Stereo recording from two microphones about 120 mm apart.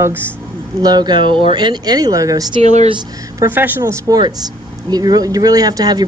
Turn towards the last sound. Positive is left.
turn(degrees=-35)  # may be behind; listen again after turning